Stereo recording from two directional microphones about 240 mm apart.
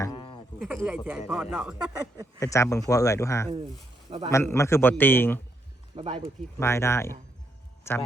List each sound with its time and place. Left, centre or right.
0.0 s a sound: centre
0.6 s speech: centre
2.4 s speech: centre
4.1 s speech: right
4.4 s speech: centre
6.0 s speech: right
6.6 s speech: centre